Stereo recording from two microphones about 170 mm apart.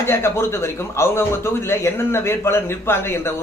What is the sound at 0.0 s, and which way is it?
A man's voice, 15° left (ahead or behind).